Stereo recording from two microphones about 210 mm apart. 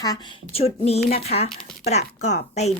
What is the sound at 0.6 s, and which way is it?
A woman's voice, 30° left (ahead or behind).